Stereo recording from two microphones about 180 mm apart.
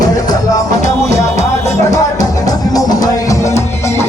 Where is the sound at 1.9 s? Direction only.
20° left (ahead or behind).